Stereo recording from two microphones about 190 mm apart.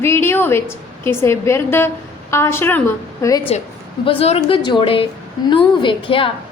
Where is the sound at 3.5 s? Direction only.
35° left (ahead or behind).